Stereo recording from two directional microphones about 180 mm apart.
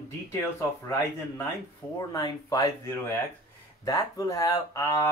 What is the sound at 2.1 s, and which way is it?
Speech, 20° left (ahead or behind).